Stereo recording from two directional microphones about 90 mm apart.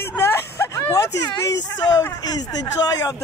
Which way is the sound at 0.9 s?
40° left (ahead or behind).